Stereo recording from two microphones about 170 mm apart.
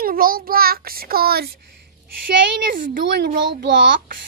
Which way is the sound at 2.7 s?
55° right (ahead or behind).